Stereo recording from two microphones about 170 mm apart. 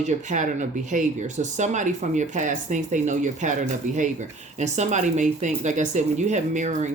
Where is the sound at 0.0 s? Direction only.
45° right (ahead or behind).